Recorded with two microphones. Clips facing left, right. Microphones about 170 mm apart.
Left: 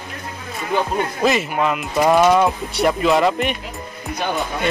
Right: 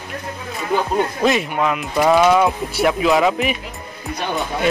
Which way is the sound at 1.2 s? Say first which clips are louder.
Left 1 dB; centre (ahead or behind).